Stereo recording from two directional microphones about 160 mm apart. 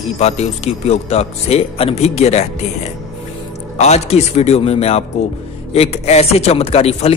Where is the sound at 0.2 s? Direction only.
40° left (ahead or behind).